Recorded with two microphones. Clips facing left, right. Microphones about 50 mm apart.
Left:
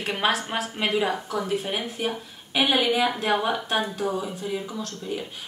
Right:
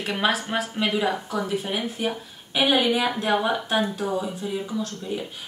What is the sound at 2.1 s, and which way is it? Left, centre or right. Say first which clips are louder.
A woman's voice: even; centre.